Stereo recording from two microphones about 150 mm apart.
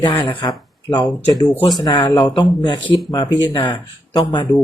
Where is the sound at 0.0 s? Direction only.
30° left (ahead or behind).